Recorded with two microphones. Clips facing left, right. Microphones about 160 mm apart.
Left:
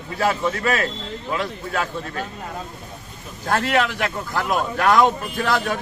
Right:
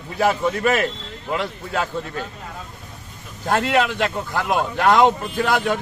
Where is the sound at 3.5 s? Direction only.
20° right (ahead or behind).